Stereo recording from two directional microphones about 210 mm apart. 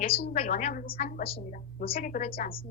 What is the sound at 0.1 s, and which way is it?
Speech, 25° left (ahead or behind).